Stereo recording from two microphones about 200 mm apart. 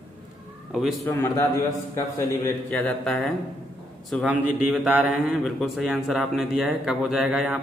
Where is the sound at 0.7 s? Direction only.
Centre (ahead or behind).